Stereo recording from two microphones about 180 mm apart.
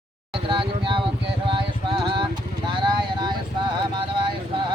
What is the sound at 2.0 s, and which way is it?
Vehicle, 30° right (ahead or behind).